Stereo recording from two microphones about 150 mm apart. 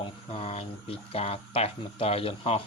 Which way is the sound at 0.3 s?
40° left (ahead or behind).